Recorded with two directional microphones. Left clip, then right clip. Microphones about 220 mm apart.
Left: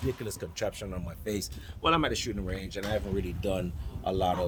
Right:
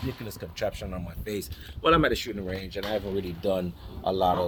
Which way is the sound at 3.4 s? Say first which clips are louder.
Right 6 dB; 35° left (ahead or behind).